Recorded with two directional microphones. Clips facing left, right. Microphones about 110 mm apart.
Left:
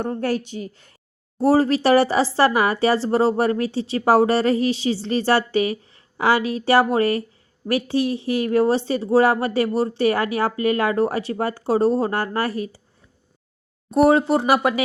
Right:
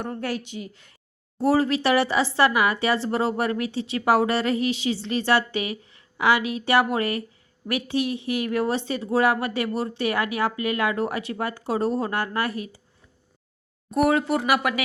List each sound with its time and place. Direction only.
0.0 s speech: 30° left (ahead or behind)
13.9 s speech: 30° left (ahead or behind)